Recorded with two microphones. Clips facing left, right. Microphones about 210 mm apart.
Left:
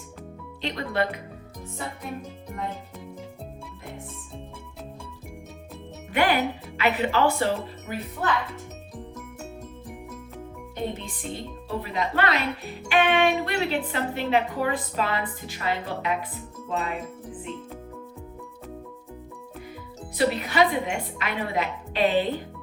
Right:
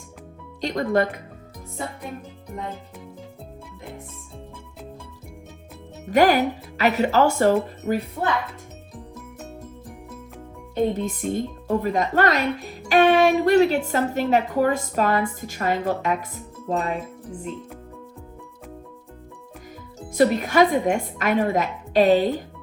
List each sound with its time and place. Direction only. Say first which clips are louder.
0.6 s a woman's voice: right 6 dB; 45° right (ahead or behind)
6.1 s speech: right 6 dB; 40° right (ahead or behind)
10.9 s a woman's voice: right 10 dB; 45° right (ahead or behind)
20.1 s a woman's voice: right 5 dB; 45° right (ahead or behind)